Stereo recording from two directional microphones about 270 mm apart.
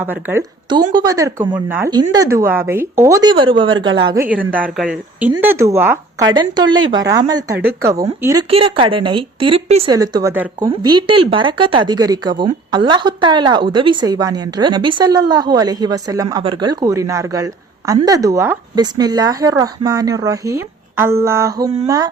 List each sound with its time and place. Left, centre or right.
0.0 s a woman's voice: centre